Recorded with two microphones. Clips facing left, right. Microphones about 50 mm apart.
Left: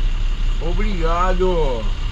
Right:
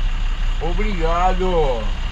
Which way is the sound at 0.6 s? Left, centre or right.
Centre.